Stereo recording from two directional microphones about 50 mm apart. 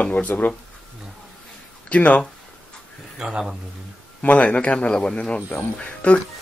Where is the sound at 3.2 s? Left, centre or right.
Centre.